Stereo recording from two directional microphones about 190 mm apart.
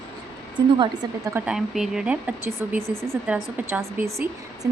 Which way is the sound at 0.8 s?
15° right (ahead or behind).